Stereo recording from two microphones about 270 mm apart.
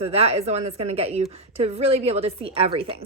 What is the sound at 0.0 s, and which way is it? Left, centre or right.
A woman's voice, right.